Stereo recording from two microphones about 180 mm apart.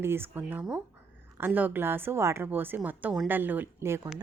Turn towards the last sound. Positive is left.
turn(degrees=-10)  # may be behind; listen again after turning